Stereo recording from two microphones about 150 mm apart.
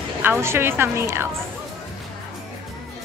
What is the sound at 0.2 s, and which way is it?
A woman's voice, 15° right (ahead or behind).